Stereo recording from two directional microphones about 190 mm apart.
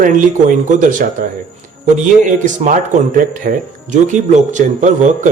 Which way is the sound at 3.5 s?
45° right (ahead or behind).